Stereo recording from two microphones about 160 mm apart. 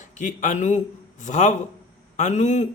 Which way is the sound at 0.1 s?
50° left (ahead or behind).